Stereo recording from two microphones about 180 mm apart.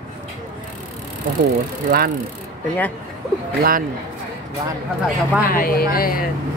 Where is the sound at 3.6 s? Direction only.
55° right (ahead or behind).